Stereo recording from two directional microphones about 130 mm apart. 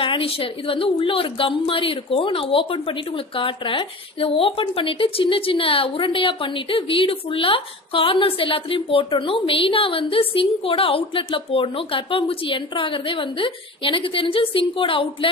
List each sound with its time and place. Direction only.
0.0 s a woman's voice: 45° left (ahead or behind)